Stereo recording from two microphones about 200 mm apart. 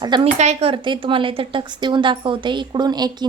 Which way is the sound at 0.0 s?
20° right (ahead or behind).